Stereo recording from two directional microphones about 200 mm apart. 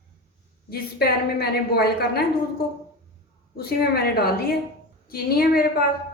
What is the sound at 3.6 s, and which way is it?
A woman's voice, 50° left (ahead or behind).